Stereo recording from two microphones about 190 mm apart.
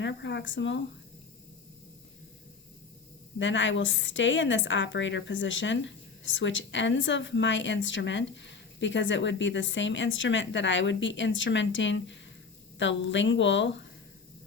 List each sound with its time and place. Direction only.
0.0 s a woman's voice: 65° left (ahead or behind)
3.3 s a woman's voice: 75° left (ahead or behind)